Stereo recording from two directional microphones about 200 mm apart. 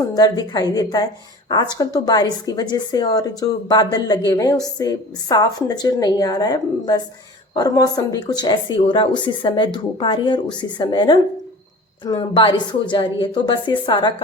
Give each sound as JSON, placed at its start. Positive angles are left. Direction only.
{"t": 0.1, "sound": "a woman's voice", "side_deg": 20}